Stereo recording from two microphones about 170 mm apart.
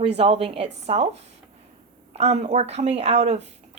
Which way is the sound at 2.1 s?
40° right (ahead or behind).